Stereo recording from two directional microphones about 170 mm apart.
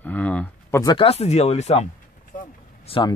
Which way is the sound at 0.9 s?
35° left (ahead or behind).